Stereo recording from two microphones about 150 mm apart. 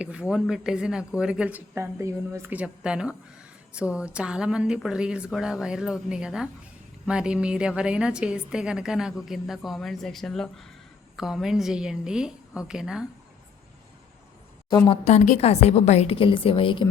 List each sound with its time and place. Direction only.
0.0 s a woman's voice: 5° right (ahead or behind)
14.8 s a woman's voice: 50° left (ahead or behind)